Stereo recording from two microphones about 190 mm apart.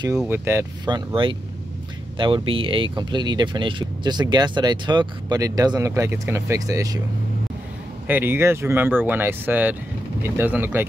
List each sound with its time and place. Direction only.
0.3 s speech: 15° right (ahead or behind)
8.1 s speech: 10° right (ahead or behind)